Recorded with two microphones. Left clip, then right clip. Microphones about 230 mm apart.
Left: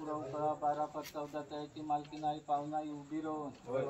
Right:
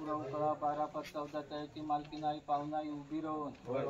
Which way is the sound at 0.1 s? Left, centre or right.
Centre.